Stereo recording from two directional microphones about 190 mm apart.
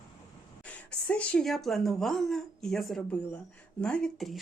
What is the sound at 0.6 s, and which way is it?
A woman's voice, 5° left (ahead or behind).